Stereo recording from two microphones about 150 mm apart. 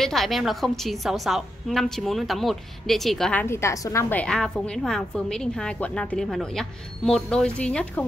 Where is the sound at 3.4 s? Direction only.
20° left (ahead or behind).